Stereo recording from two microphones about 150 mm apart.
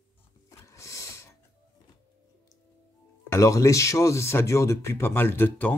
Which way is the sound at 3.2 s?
20° left (ahead or behind).